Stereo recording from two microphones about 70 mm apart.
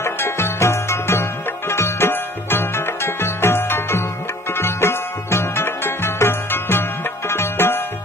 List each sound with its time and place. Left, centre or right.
0.0 s music: left